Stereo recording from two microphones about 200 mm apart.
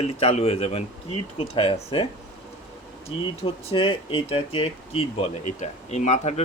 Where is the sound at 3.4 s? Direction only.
25° left (ahead or behind).